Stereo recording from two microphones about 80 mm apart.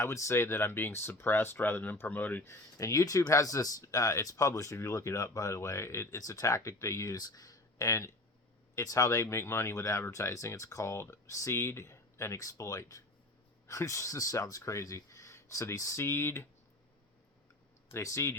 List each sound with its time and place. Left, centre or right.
0.0 s speech: left
2.5 s speech: left
17.9 s speech: left